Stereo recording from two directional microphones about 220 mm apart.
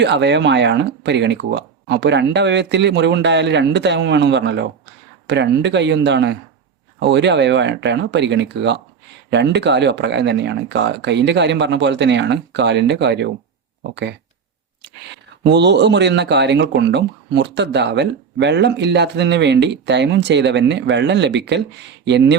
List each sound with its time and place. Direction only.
0.0 s speech: 50° right (ahead or behind)
15.4 s speech: 50° right (ahead or behind)